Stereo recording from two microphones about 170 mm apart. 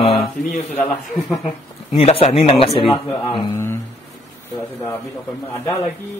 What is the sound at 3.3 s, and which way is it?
Speech, 30° left (ahead or behind).